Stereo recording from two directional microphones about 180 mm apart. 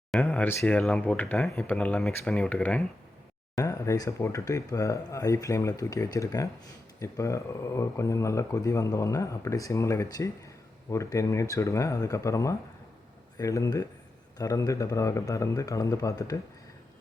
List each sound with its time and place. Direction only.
0.1 s speech: 10° left (ahead or behind)
3.5 s speech: 20° left (ahead or behind)